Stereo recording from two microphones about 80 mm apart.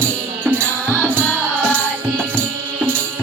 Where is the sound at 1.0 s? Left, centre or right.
Right.